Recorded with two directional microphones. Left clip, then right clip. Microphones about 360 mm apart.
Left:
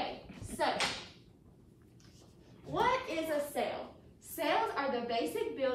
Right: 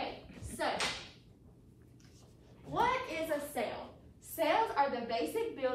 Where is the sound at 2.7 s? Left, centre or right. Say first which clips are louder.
Left 1 dB; centre.